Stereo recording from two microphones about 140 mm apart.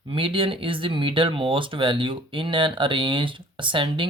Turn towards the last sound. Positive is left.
turn(degrees=-35)  # may be behind; listen again after turning